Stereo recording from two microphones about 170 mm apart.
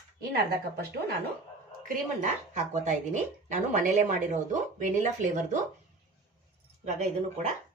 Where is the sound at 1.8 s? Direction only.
45° right (ahead or behind).